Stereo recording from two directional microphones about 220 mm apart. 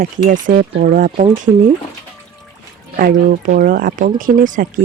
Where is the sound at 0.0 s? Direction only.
35° right (ahead or behind).